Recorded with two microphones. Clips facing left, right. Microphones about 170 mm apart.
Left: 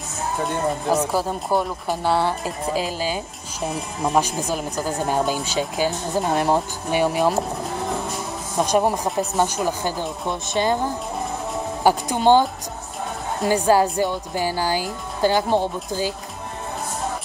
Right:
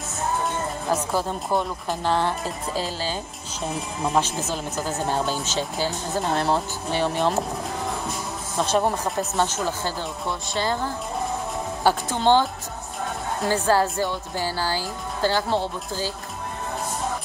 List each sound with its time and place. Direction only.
0.9 s speech: 5° left (ahead or behind)
8.5 s speech: 10° left (ahead or behind)
13.5 s speech: 15° left (ahead or behind)